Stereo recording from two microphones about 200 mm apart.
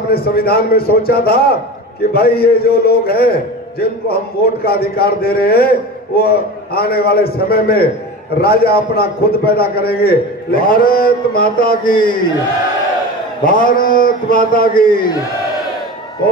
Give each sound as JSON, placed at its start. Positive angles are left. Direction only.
{"t": 0.1, "sound": "a man's voice", "side_deg": 50}
{"t": 13.4, "sound": "a man's voice", "side_deg": 45}